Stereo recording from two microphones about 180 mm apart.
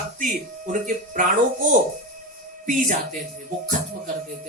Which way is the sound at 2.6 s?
45° right (ahead or behind).